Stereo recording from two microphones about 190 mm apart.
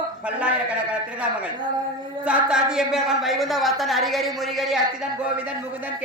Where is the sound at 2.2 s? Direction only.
5° right (ahead or behind).